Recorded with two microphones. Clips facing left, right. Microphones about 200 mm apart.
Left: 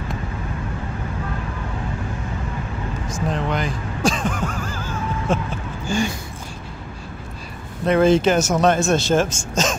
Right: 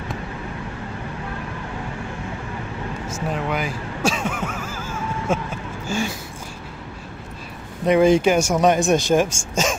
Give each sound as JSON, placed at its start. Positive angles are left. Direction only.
{"t": 3.1, "sound": "music", "side_deg": -5}
{"t": 5.9, "sound": "speech", "side_deg": -5}
{"t": 7.8, "sound": "speech", "side_deg": -15}